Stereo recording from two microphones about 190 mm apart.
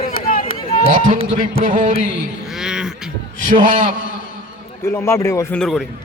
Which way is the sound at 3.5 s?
45° right (ahead or behind).